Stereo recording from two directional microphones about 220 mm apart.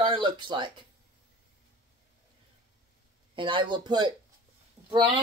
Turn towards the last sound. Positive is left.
turn(degrees=-25)  # may be behind; listen again after turning